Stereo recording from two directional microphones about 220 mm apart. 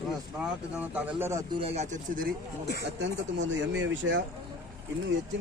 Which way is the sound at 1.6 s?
30° right (ahead or behind).